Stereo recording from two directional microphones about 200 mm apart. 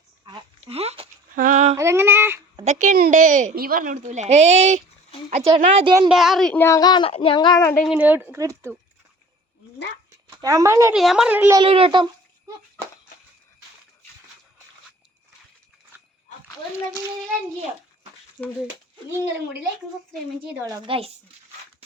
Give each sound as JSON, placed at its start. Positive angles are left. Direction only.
{"t": 0.3, "sound": "a sound", "side_deg": -25}
{"t": 1.4, "sound": "female singing", "side_deg": -40}
{"t": 1.7, "sound": "a sound", "side_deg": -15}
{"t": 2.6, "sound": "a woman's voice", "side_deg": -40}
{"t": 6.1, "sound": "speech", "side_deg": 0}
{"t": 7.9, "sound": "speech", "side_deg": -5}
{"t": 10.2, "sound": "speech", "side_deg": -15}
{"t": 10.9, "sound": "a woman's voice", "side_deg": 0}
{"t": 11.6, "sound": "speech", "side_deg": -25}
{"t": 18.4, "sound": "a woman's voice", "side_deg": -5}
{"t": 20.7, "sound": "speech", "side_deg": -20}